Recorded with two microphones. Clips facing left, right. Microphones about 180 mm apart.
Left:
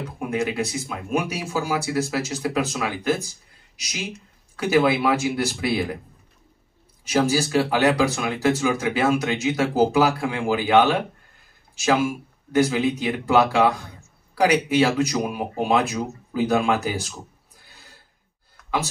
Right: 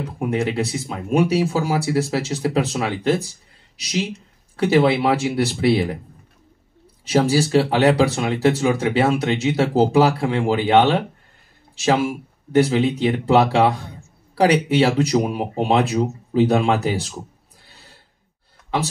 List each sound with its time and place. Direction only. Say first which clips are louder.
0.3 s speech: right 2 dB; 30° right (ahead or behind)
7.1 s speech: right 3 dB; 30° right (ahead or behind)